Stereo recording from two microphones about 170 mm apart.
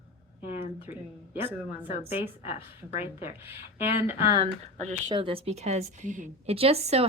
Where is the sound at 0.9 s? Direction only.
45° left (ahead or behind).